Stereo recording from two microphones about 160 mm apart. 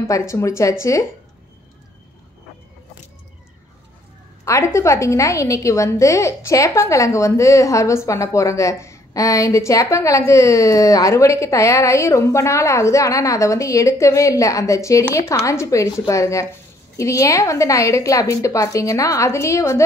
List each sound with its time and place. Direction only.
0.0 s a woman's voice: 20° left (ahead or behind)
4.5 s a woman's voice: 20° left (ahead or behind)